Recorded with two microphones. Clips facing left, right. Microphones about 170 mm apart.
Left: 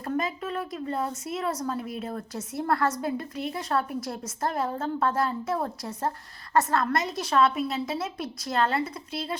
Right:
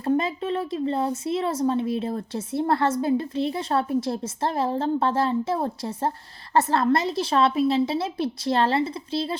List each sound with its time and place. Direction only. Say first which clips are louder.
0.0 s speech: right 6 dB; 30° right (ahead or behind)